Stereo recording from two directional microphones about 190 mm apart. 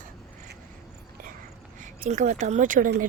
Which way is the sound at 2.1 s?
40° right (ahead or behind).